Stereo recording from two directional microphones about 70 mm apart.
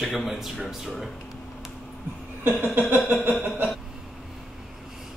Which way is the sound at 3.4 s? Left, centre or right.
Right.